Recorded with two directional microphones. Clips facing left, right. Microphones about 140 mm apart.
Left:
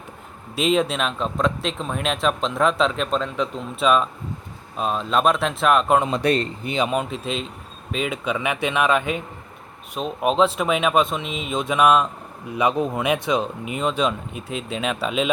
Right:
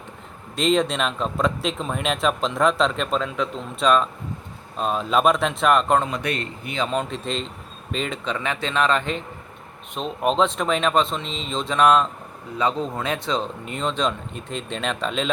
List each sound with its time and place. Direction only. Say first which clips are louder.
0.5 s speech: even; 5° left (ahead or behind)
6.1 s speech: left 6 dB; 30° left (ahead or behind)
6.7 s speech: left 2 dB; 10° left (ahead or behind)